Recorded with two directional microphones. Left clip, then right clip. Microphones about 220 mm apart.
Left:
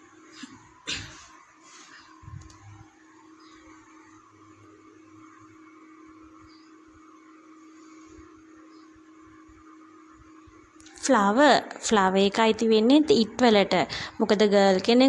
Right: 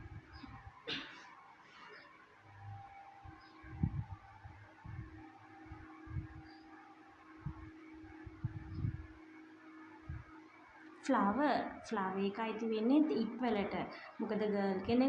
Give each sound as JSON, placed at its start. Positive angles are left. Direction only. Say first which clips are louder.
{"t": 11.0, "sound": "a woman's voice", "louder": "left 14 dB", "side_deg": 40}